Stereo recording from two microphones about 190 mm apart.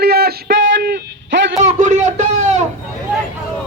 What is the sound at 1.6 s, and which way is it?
Speech, 40° right (ahead or behind).